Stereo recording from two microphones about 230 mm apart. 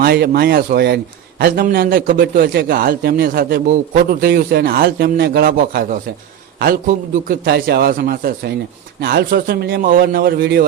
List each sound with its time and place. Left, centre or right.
0.0 s a man's voice: right